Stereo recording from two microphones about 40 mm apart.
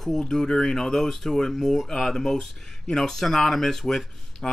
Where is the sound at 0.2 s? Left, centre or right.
Centre.